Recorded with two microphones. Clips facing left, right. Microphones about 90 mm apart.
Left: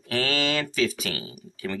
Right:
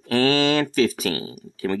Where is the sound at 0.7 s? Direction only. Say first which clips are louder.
Right 6 dB; 40° right (ahead or behind).